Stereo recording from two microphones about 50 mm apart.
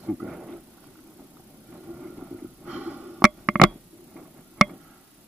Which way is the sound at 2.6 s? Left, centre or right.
Right.